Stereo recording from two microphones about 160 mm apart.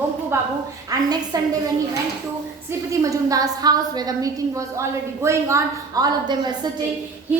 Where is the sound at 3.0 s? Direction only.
20° right (ahead or behind).